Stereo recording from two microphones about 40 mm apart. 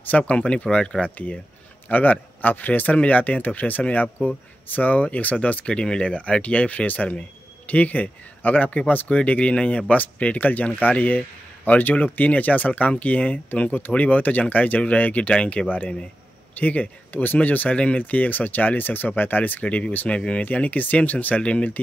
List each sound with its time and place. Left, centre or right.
0.1 s speech: left
1.0 s speech: left
5.7 s speech: left
6.1 s speech: left
9.1 s speech: left
15.3 s speech: left
16.5 s speech: left
17.1 s speech: left
17.4 s speech: left
17.7 s speech: left
18.0 s speech: left
19.6 s speech: left
20.4 s speech: left
21.4 s speech: left